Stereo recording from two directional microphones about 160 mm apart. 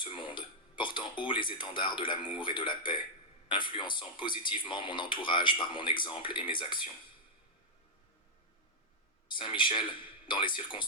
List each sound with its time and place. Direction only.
0.0 s speech: 30° left (ahead or behind)
9.3 s speech: 30° left (ahead or behind)